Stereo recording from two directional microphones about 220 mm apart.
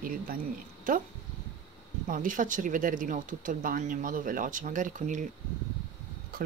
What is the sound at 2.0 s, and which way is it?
Speech, 35° right (ahead or behind).